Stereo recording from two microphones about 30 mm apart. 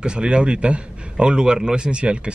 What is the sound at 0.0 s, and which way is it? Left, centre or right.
Speech, right.